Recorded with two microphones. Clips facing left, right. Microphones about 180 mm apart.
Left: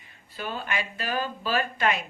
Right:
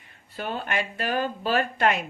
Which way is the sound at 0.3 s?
60° right (ahead or behind).